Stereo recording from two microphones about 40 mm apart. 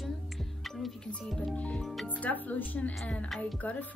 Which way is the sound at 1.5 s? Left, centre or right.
Left.